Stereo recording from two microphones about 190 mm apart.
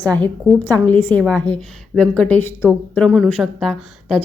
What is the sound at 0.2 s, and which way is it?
A woman's voice, 10° left (ahead or behind).